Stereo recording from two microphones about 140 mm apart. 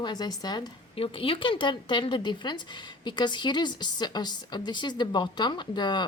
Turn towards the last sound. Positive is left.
turn(degrees=30)  # may be behind; listen again after turning